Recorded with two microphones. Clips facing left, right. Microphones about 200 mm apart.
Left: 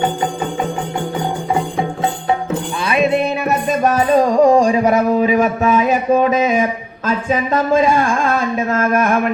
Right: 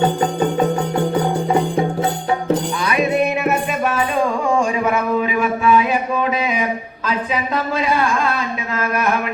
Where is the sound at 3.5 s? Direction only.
40° left (ahead or behind).